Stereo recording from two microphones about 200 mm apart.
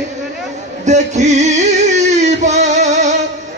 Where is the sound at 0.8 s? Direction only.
35° right (ahead or behind).